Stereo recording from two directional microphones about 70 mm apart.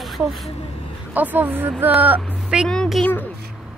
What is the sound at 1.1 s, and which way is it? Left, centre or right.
Speech, right.